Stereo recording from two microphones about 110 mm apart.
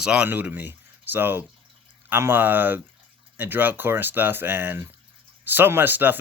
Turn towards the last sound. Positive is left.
turn(degrees=-15)  # may be behind; listen again after turning